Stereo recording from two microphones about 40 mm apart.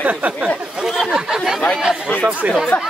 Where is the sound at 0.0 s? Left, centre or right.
Right.